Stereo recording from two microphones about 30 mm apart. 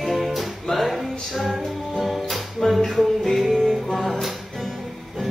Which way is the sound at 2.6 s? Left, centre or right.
Centre.